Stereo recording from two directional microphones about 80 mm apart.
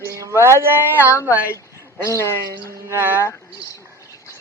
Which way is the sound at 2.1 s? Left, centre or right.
Left.